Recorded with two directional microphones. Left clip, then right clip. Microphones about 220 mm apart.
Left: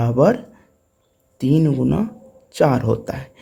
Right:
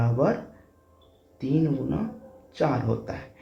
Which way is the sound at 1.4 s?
55° left (ahead or behind).